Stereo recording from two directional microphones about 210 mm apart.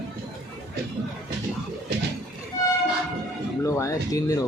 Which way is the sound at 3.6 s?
15° left (ahead or behind).